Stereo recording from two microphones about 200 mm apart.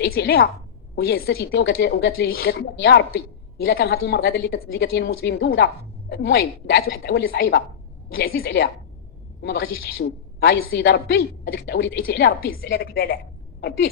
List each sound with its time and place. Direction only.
0.0 s a woman's voice: 50° left (ahead or behind)
9.8 s a woman's voice: 50° left (ahead or behind)